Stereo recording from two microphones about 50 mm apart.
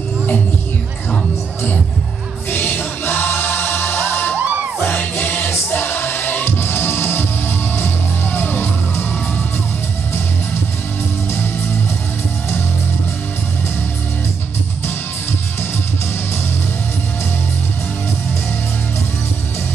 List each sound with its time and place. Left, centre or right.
2.5 s music: left
4.4 s music: right
5.2 s music: left